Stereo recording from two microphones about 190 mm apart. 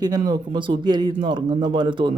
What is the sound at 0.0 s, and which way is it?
Speech, 20° right (ahead or behind).